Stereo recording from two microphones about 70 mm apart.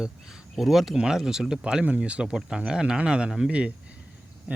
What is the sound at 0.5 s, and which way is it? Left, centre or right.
Speech, centre.